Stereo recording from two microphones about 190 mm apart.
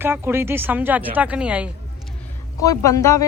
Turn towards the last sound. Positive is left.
turn(degrees=15)  # may be behind; listen again after turning